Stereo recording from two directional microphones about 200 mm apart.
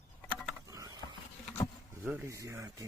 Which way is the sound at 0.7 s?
20° right (ahead or behind).